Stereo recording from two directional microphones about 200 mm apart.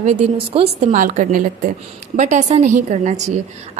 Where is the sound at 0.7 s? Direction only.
40° right (ahead or behind).